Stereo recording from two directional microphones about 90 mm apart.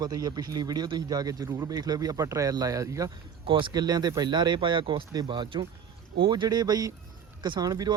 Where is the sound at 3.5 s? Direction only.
70° right (ahead or behind).